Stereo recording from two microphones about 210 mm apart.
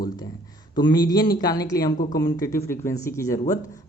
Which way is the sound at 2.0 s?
40° left (ahead or behind).